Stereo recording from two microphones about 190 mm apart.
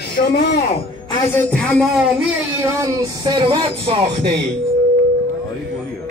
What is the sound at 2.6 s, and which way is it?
Speech, 15° right (ahead or behind).